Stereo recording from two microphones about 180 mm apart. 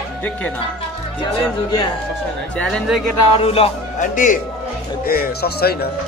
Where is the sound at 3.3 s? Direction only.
35° left (ahead or behind).